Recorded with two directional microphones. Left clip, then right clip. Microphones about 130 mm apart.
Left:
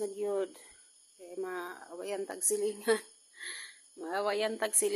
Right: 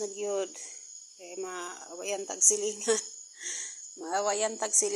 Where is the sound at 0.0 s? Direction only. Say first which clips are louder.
Right 1 dB; 25° left (ahead or behind).